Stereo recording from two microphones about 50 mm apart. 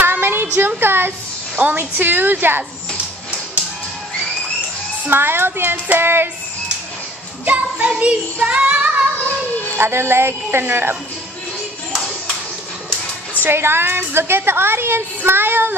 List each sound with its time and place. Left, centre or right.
0.0 s a sound: right
0.6 s a woman's voice: right
5.1 s a woman's voice: right
7.4 s child singing: right
9.8 s a woman's voice: right
13.5 s a woman's voice: right